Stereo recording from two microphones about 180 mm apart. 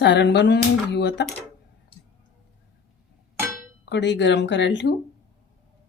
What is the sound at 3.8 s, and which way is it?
Speech, 75° left (ahead or behind).